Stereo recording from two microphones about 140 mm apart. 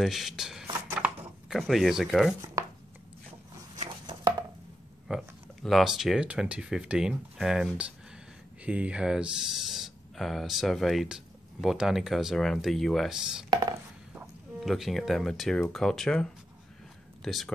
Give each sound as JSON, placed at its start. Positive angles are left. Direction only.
{"t": 0.0, "sound": "speech", "side_deg": 0}
{"t": 0.7, "sound": "a sound", "side_deg": -20}
{"t": 1.6, "sound": "speech", "side_deg": 0}
{"t": 2.6, "sound": "chopping", "side_deg": -25}
{"t": 5.0, "sound": "speech", "side_deg": 0}
{"t": 14.6, "sound": "speech", "side_deg": 0}